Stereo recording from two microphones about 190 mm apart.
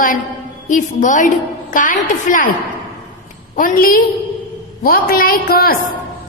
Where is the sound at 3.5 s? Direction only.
45° left (ahead or behind).